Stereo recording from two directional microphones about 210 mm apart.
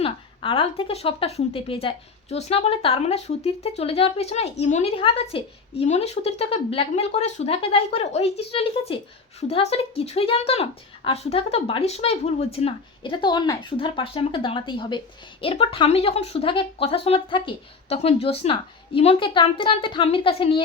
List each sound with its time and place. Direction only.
0.0 s speech: 25° left (ahead or behind)